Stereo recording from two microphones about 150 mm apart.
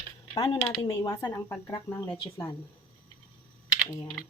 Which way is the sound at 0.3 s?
25° left (ahead or behind).